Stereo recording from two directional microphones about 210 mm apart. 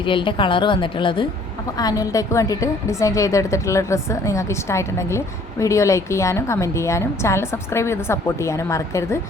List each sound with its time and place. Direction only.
0.0 s a woman's voice: 25° left (ahead or behind)